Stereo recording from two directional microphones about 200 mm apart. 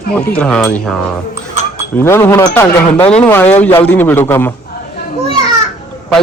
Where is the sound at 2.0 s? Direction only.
10° left (ahead or behind).